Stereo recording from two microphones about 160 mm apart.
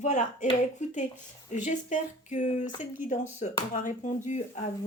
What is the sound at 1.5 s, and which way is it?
A woman's voice, 50° left (ahead or behind).